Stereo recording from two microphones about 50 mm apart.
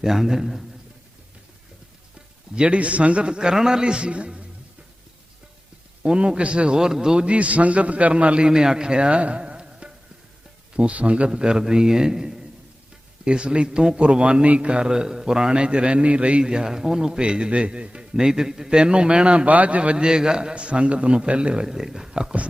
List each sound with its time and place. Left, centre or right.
0.0 s a man's voice: centre
2.6 s a man's voice: right
6.0 s a man's voice: centre
11.3 s a man's voice: centre
21.7 s a man's voice: centre